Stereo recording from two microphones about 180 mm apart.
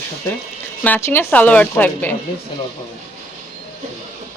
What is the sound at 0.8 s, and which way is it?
Speech, 10° left (ahead or behind).